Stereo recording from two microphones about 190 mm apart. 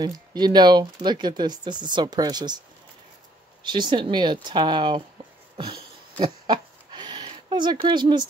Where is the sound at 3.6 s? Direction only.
25° right (ahead or behind).